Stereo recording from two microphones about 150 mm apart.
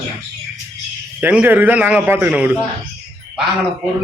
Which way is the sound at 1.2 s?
10° right (ahead or behind).